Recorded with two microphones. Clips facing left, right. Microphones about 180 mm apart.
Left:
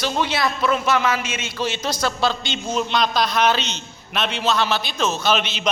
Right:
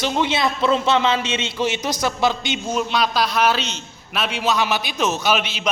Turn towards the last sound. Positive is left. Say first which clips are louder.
# even
turn(degrees=-10)  # may be behind; listen again after turning